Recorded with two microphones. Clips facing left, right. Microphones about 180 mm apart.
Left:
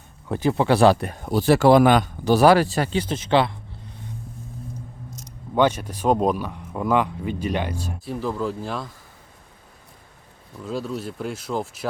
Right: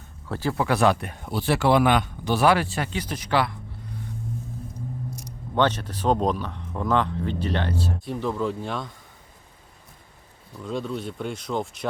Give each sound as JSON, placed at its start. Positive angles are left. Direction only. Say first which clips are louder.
{"t": 0.3, "sound": "speech", "louder": "left 5 dB", "side_deg": 20}
{"t": 5.5, "sound": "speech", "louder": "left 3 dB", "side_deg": 10}
{"t": 10.6, "sound": "speech", "louder": "left 1 dB", "side_deg": 5}